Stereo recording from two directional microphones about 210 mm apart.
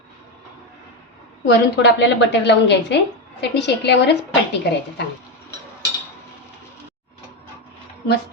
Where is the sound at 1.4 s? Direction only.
55° left (ahead or behind).